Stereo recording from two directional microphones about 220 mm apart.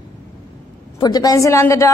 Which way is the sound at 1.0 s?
15° left (ahead or behind).